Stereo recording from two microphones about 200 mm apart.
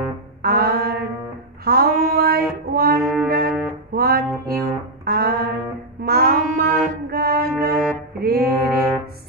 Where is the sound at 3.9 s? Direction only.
50° right (ahead or behind).